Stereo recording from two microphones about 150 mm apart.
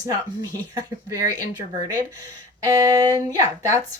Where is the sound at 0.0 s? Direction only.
20° right (ahead or behind).